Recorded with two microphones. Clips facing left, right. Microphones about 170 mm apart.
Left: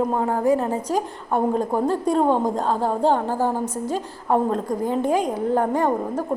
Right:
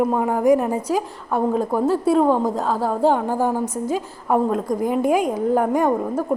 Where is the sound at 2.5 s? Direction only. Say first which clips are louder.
Even; 5° right (ahead or behind).